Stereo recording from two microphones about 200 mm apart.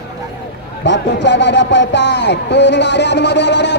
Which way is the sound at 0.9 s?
60° left (ahead or behind).